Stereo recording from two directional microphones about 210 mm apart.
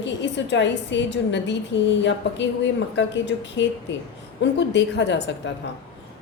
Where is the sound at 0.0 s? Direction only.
55° left (ahead or behind).